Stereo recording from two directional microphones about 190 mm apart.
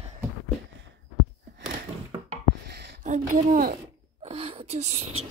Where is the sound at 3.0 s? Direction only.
40° right (ahead or behind).